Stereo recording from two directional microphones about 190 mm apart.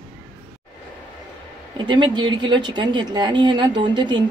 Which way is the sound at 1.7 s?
25° right (ahead or behind).